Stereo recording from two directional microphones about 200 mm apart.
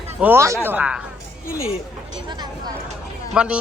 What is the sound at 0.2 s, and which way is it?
Speech, 10° right (ahead or behind).